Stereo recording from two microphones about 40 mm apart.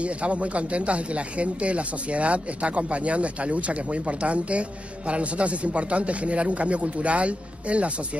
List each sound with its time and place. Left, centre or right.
0.0 s speech: right